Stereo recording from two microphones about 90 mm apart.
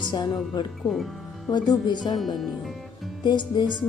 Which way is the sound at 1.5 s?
55° left (ahead or behind).